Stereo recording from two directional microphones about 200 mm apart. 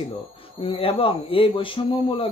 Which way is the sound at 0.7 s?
25° left (ahead or behind).